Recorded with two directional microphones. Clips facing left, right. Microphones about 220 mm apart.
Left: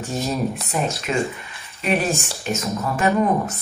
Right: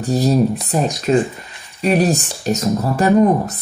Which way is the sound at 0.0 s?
35° right (ahead or behind).